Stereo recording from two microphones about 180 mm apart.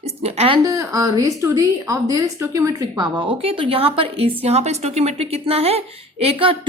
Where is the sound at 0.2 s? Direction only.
35° right (ahead or behind).